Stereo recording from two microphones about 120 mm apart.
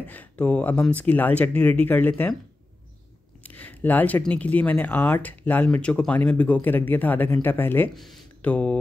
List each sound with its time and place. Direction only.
0.0 s speech: 15° left (ahead or behind)
3.4 s speech: 15° left (ahead or behind)
7.9 s speech: centre (ahead or behind)
8.4 s speech: 10° left (ahead or behind)